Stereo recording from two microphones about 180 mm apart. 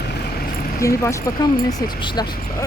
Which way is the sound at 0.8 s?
15° left (ahead or behind).